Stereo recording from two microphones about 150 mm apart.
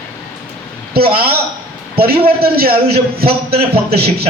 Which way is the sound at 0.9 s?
90° right.